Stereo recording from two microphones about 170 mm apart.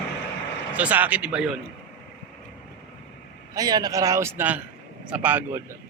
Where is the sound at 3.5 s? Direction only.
20° right (ahead or behind).